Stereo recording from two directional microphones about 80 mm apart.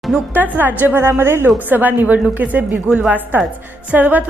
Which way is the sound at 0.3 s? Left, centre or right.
Right.